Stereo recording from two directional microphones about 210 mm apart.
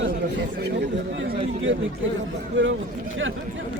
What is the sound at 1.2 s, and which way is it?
Speech, 65° right (ahead or behind).